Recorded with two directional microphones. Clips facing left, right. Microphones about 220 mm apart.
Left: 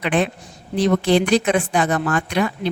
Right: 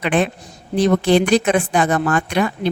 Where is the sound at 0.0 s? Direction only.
50° right (ahead or behind).